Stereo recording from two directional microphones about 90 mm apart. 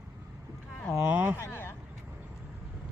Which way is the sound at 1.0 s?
20° right (ahead or behind).